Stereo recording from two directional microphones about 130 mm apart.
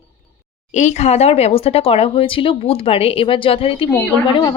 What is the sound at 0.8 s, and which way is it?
A woman's voice, 65° left (ahead or behind).